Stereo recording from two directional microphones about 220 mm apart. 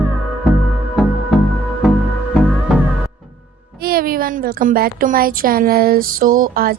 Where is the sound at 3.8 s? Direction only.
45° right (ahead or behind).